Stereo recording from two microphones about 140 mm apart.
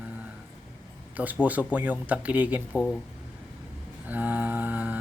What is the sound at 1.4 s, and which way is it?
A man's voice, 10° right (ahead or behind).